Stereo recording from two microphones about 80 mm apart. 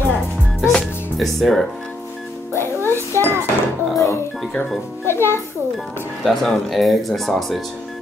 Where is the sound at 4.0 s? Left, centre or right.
Left.